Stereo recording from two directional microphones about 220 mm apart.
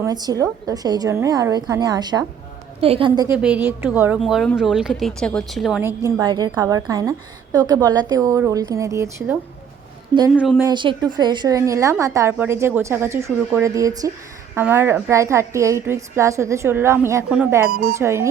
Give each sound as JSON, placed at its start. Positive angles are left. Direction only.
{"t": 0.0, "sound": "a woman's voice", "side_deg": -15}
{"t": 3.2, "sound": "speech", "side_deg": -5}
{"t": 5.8, "sound": "a woman's voice", "side_deg": -15}
{"t": 10.3, "sound": "speech", "side_deg": 0}
{"t": 10.6, "sound": "a woman's voice", "side_deg": -20}